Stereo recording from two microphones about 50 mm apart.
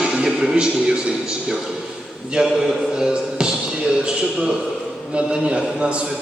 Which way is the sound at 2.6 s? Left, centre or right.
Centre.